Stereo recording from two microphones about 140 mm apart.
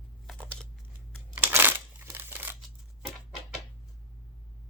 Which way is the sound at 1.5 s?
15° right (ahead or behind).